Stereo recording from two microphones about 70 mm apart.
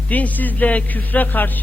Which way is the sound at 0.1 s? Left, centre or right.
Left.